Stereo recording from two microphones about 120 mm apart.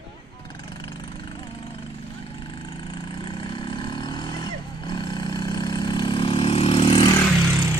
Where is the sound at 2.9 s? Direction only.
40° left (ahead or behind).